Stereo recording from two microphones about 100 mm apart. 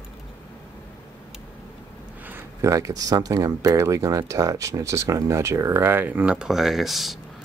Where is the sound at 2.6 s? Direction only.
30° right (ahead or behind).